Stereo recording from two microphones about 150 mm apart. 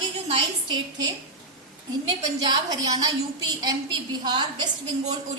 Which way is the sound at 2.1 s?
30° right (ahead or behind).